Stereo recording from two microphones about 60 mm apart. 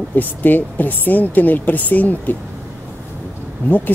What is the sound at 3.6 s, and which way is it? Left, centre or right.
Speech, left.